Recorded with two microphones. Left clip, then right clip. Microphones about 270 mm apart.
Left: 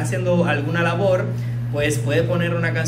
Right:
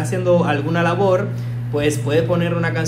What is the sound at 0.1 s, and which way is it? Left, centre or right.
A man's voice, centre.